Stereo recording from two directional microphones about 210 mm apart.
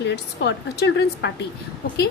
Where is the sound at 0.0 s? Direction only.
55° left (ahead or behind).